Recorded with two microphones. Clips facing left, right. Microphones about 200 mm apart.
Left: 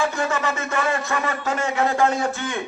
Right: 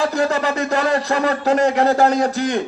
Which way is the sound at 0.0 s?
35° right (ahead or behind).